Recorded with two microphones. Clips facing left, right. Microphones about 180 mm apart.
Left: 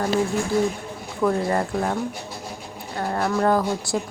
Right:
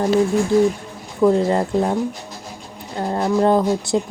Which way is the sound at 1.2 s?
25° right (ahead or behind).